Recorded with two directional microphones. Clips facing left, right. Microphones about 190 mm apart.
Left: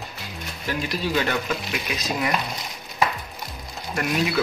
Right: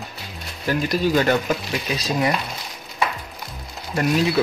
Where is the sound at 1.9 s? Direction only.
30° right (ahead or behind).